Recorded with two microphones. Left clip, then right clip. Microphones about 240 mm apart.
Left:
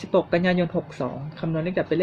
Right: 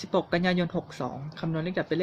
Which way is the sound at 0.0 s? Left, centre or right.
Right.